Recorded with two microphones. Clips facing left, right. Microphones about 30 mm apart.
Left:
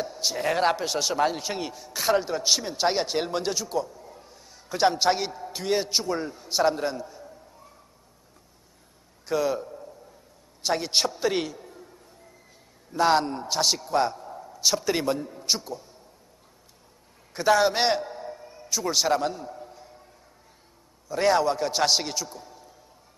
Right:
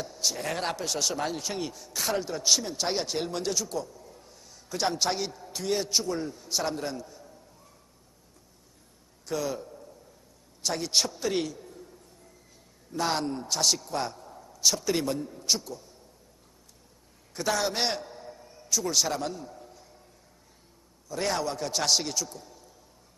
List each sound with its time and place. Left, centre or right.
0.0 s speech: left
9.2 s a man's voice: centre
12.9 s a man's voice: left
17.3 s a sound: left
21.1 s a man's voice: centre